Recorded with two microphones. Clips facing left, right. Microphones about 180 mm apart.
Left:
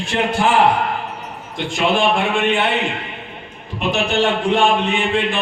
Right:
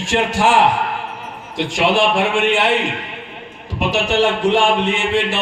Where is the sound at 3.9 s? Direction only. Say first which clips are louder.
Right 1 dB; 90° right.